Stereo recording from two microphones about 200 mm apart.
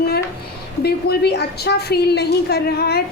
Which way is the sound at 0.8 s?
55° left (ahead or behind).